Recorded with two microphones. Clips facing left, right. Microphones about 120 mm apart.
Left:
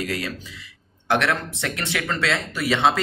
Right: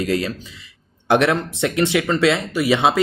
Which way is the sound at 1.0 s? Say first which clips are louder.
Right 5 dB; 20° right (ahead or behind).